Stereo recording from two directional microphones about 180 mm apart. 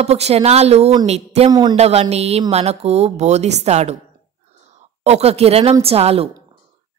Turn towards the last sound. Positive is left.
turn(degrees=-35)  # may be behind; listen again after turning